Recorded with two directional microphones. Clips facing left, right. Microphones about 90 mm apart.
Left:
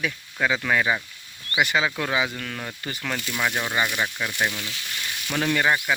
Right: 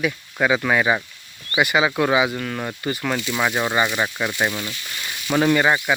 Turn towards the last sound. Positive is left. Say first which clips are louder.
# right 4 dB
turn(degrees=-15)  # may be behind; listen again after turning